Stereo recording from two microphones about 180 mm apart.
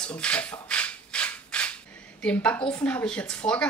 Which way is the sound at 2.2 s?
5° left (ahead or behind).